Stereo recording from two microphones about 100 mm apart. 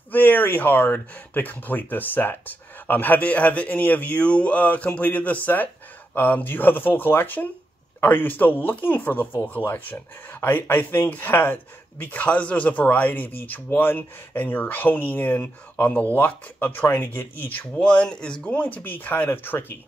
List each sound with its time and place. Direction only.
0.1 s speech: 15° left (ahead or behind)